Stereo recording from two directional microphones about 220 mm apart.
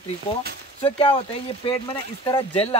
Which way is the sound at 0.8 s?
25° left (ahead or behind).